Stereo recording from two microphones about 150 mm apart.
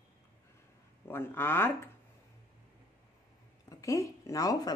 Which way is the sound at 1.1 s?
15° left (ahead or behind).